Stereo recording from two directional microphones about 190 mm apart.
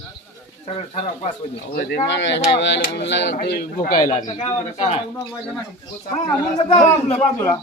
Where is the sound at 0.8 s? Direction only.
35° left (ahead or behind).